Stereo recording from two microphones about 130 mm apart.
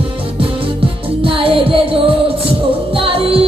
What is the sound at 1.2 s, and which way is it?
Music, 45° right (ahead or behind).